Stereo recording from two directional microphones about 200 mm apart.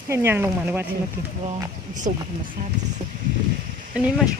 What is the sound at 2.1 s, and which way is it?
Speech, 35° right (ahead or behind).